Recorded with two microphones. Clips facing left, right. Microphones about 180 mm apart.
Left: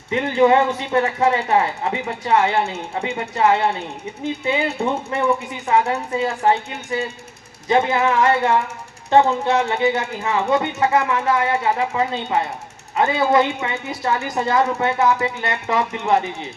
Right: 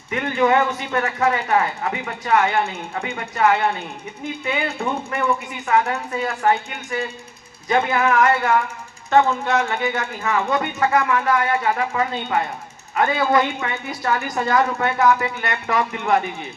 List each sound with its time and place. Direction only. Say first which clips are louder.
0.1 s speech: left 3 dB; 25° left (ahead or behind)